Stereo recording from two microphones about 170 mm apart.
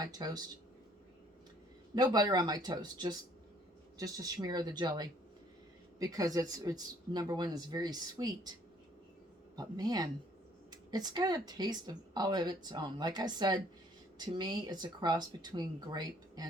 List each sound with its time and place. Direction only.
0.0 s speech: 20° right (ahead or behind)
2.0 s speech: 25° right (ahead or behind)
9.6 s speech: 20° right (ahead or behind)